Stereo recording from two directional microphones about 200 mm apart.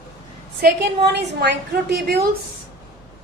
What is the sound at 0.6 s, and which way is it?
A woman's voice, 55° right (ahead or behind).